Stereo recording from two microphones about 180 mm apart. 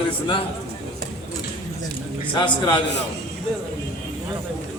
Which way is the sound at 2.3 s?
30° left (ahead or behind).